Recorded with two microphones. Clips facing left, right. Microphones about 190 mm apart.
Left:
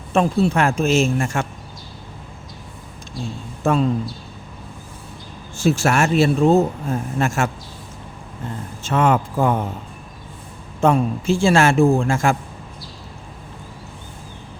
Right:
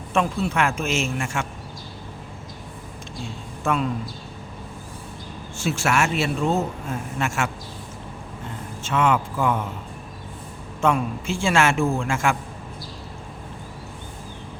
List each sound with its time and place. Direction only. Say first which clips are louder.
0.1 s speech: left 6 dB; 35° left (ahead or behind)
3.6 s a man's voice: left 5 dB; 35° left (ahead or behind)
5.5 s speech: left 5 dB; 35° left (ahead or behind)
8.8 s speech: left 3 dB; 40° left (ahead or behind)
10.8 s speech: left 5 dB; 35° left (ahead or behind)